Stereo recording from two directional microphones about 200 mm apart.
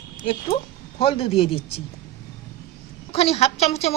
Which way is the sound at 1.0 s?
30° left (ahead or behind).